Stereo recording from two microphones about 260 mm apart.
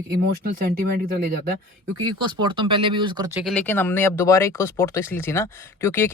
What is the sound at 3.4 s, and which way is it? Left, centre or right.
Speech, centre.